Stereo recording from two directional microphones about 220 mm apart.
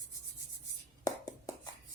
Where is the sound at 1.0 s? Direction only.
15° left (ahead or behind).